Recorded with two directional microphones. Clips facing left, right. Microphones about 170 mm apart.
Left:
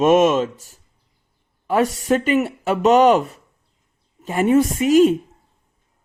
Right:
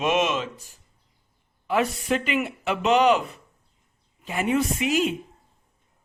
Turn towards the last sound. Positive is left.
turn(degrees=45)  # may be behind; listen again after turning